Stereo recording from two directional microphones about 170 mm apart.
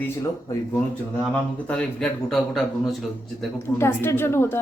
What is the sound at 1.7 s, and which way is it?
A man's voice, 5° left (ahead or behind).